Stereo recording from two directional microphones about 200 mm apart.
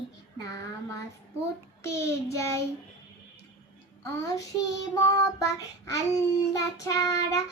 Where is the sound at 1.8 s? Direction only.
15° left (ahead or behind).